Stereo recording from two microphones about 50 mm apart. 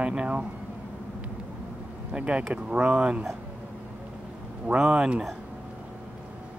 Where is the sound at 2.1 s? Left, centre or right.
Right.